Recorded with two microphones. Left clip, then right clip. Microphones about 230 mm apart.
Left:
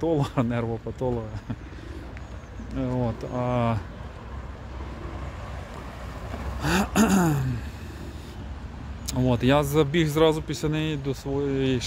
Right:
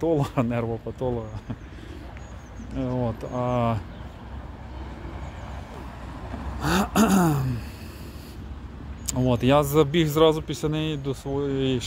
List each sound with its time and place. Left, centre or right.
0.0 s speech: centre
2.8 s speech: centre
6.6 s a man's voice: centre
9.0 s a man's voice: centre